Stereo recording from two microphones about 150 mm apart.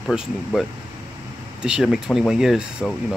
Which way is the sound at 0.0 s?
Centre (ahead or behind).